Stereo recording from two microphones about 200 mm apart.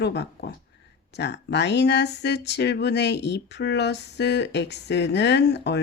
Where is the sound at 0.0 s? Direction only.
60° left (ahead or behind).